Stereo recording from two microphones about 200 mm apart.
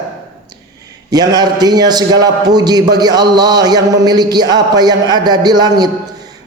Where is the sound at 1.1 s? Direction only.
20° right (ahead or behind).